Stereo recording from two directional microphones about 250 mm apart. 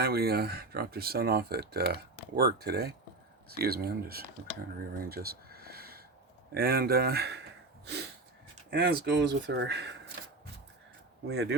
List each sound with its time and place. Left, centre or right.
0.0 s speech: right
5.0 s a sound: right
6.5 s speech: right
8.7 s speech: right
11.3 s speech: right